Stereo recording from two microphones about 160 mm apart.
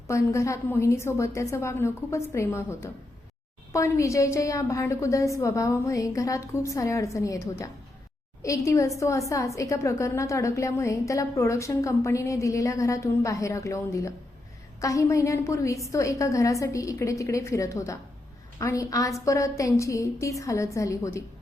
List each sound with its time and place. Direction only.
0.1 s a woman's voice: 20° left (ahead or behind)